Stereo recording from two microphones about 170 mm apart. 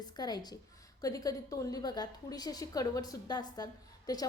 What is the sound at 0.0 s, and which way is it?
A woman's voice, 25° left (ahead or behind).